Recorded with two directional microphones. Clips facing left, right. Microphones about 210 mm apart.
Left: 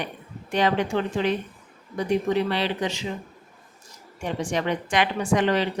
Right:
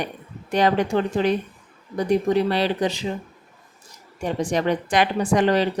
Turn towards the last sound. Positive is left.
turn(degrees=-35)  # may be behind; listen again after turning